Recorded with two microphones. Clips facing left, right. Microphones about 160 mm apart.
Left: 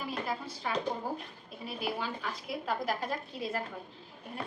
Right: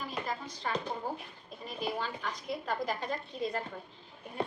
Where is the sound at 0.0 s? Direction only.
5° left (ahead or behind).